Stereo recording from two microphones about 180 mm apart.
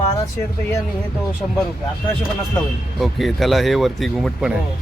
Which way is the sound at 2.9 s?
Centre (ahead or behind).